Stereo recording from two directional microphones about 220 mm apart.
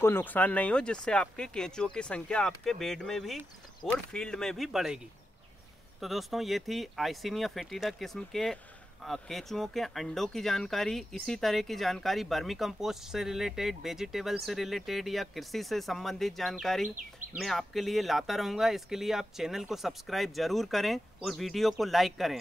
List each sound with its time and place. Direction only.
0.0 s speech: 10° left (ahead or behind)
16.8 s speech: 35° right (ahead or behind)
17.4 s speech: centre (ahead or behind)